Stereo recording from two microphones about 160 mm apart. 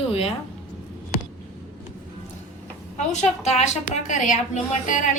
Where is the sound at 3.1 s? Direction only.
45° left (ahead or behind).